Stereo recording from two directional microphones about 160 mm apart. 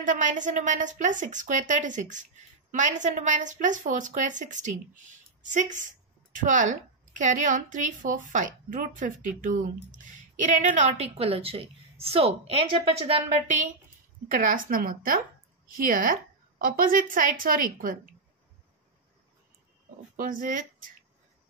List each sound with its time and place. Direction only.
0.0 s a woman's voice: 50° right (ahead or behind); by 13.2 s 35° right (ahead or behind)
14.3 s a woman's voice: 55° right (ahead or behind)
20.2 s speech: 60° right (ahead or behind)